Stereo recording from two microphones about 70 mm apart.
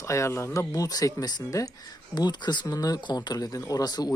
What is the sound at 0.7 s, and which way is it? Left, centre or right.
Speech, left.